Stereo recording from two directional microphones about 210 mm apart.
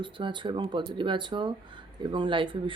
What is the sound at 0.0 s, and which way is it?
Speech, 25° right (ahead or behind).